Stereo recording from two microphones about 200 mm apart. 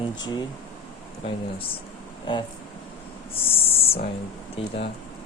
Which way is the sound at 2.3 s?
25° left (ahead or behind).